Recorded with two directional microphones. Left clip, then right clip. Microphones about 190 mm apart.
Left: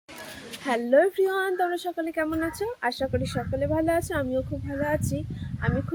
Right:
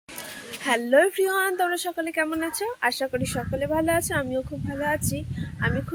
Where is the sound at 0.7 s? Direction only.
Centre (ahead or behind).